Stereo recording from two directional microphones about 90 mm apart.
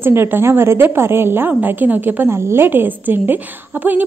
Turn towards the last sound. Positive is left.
turn(degrees=-20)  # may be behind; listen again after turning